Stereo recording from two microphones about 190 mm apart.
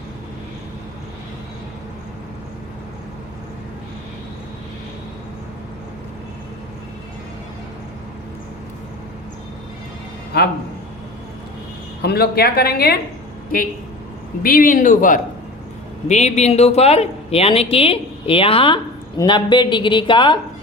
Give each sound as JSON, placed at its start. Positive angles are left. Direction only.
{"t": 10.3, "sound": "a man's voice", "side_deg": 55}
{"t": 12.0, "sound": "speech", "side_deg": 55}
{"t": 14.4, "sound": "a man's voice", "side_deg": 45}